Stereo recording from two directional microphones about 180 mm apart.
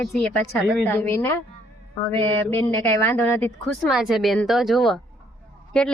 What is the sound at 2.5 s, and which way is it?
A woman's voice, 10° left (ahead or behind).